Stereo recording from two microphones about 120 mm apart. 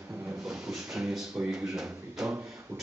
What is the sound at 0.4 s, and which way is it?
Speech, centre (ahead or behind).